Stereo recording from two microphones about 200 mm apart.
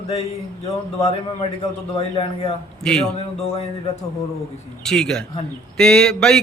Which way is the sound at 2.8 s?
5° left (ahead or behind).